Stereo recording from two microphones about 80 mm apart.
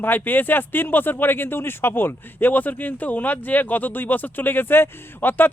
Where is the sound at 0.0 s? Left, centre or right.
Left.